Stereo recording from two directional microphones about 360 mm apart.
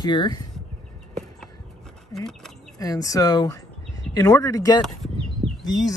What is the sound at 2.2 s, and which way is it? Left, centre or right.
Speech, centre.